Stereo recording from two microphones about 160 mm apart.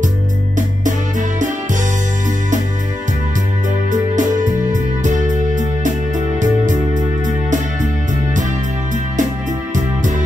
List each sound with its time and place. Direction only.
3.9 s music: 50° right (ahead or behind)